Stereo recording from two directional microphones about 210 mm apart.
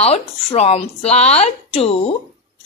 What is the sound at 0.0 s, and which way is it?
A woman's voice, 30° left (ahead or behind).